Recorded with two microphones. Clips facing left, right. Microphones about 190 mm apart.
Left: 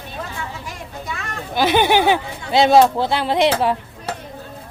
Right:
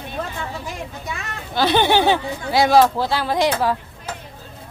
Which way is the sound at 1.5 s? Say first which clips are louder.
Left 1 dB; 15° left (ahead or behind).